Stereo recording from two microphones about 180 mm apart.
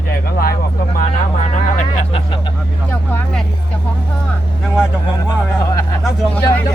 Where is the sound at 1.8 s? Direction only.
30° left (ahead or behind).